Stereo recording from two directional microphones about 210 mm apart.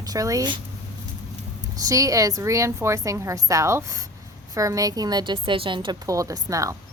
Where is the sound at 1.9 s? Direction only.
15° right (ahead or behind).